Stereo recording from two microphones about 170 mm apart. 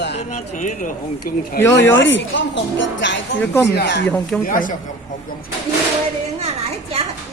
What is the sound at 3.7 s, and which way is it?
Speech, 85° left.